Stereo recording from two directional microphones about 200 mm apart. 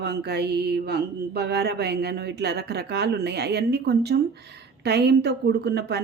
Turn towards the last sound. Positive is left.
turn(degrees=-55)  # may be behind; listen again after turning